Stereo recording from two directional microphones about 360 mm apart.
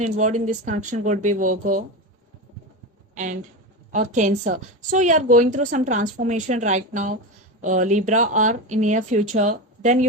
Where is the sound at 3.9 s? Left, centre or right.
Centre.